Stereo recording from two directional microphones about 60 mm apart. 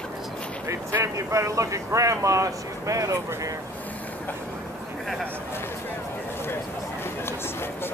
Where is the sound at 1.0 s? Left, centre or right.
Right.